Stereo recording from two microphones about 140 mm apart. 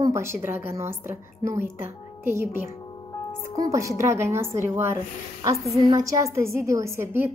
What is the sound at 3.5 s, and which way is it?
A woman's voice, 25° right (ahead or behind).